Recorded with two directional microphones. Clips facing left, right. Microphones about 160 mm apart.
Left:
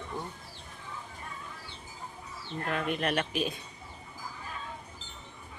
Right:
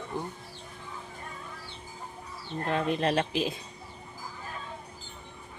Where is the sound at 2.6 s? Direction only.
30° right (ahead or behind).